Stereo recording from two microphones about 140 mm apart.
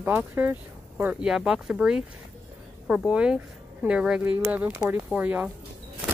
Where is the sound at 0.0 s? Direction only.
15° right (ahead or behind).